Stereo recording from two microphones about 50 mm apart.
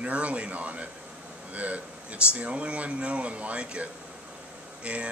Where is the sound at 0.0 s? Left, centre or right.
Right.